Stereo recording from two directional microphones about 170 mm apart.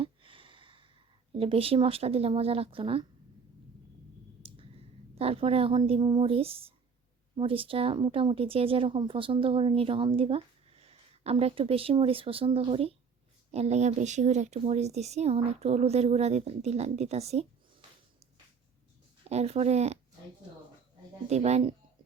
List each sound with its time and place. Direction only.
0.0 s a sound: 30° right (ahead or behind)
1.4 s speech: 35° right (ahead or behind)
5.1 s speech: 35° right (ahead or behind)
19.3 s speech: 40° right (ahead or behind)
21.2 s speech: 40° right (ahead or behind)